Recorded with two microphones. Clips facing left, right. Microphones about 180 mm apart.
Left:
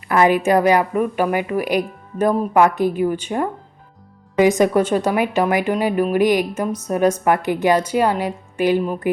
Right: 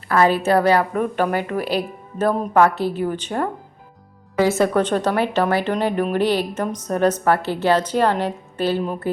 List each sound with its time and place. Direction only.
0.1 s a woman's voice: 15° left (ahead or behind)